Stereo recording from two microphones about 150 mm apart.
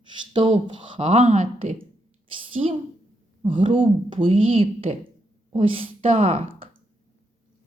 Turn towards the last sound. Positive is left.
turn(degrees=-40)  # may be behind; listen again after turning